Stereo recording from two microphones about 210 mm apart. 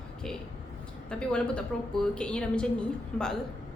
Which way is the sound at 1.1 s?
5° left (ahead or behind).